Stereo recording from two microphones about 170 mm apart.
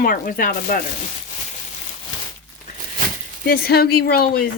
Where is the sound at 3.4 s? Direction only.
65° left (ahead or behind).